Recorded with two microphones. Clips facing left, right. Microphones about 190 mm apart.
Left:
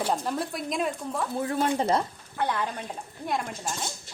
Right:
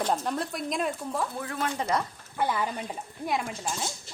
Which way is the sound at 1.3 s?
25° left (ahead or behind).